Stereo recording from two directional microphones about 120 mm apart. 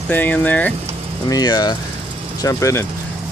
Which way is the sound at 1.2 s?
35° left (ahead or behind).